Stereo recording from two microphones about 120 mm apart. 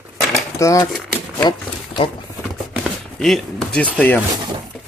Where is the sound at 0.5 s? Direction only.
25° left (ahead or behind).